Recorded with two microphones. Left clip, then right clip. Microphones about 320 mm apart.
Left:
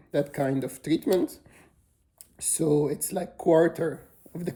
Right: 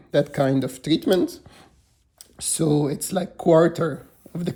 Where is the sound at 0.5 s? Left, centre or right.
Centre.